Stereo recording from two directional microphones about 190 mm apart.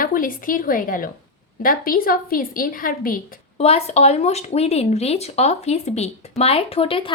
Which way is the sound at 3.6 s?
35° left (ahead or behind).